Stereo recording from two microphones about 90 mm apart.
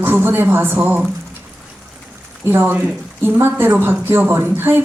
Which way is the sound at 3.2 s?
25° right (ahead or behind).